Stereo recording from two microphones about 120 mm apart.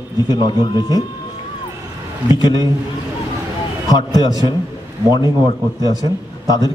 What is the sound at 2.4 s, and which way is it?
Speech, 35° left (ahead or behind).